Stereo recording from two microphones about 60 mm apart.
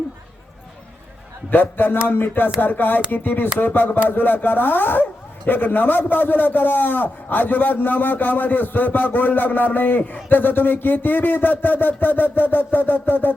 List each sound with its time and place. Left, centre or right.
1.5 s a man's voice: left